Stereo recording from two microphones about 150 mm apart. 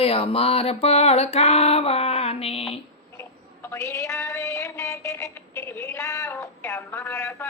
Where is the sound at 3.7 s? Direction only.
20° left (ahead or behind).